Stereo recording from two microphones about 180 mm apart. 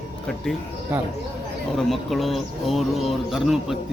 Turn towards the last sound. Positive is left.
turn(degrees=0)  # may be behind; listen again after turning